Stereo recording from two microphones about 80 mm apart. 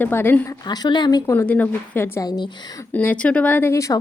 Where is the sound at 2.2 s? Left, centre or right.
Left.